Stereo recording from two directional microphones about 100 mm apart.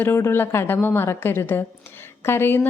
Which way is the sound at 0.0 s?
25° left (ahead or behind).